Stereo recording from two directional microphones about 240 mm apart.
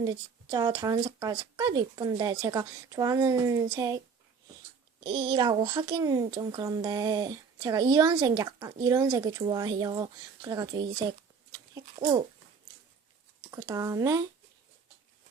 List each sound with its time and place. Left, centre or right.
0.0 s speech: centre
5.0 s speech: centre
11.5 s a sound: centre
13.5 s speech: centre